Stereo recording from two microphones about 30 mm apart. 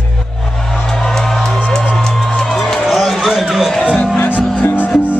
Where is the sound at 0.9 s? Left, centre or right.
Centre.